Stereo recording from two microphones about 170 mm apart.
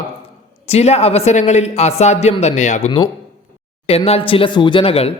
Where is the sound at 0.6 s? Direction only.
40° left (ahead or behind).